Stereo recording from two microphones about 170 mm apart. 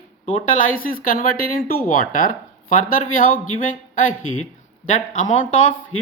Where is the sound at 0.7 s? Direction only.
55° left (ahead or behind).